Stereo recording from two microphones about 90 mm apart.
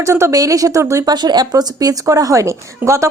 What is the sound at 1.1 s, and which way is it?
A woman's voice, 50° right (ahead or behind).